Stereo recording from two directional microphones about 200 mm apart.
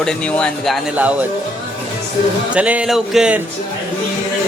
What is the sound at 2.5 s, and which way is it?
Speech, 5° right (ahead or behind).